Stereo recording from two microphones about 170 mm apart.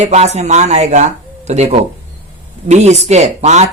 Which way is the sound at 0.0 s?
40° right (ahead or behind).